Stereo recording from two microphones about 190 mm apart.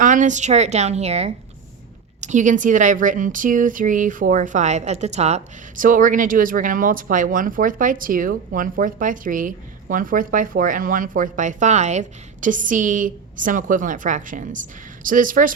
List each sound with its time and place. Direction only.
0.0 s a woman's voice: 40° right (ahead or behind)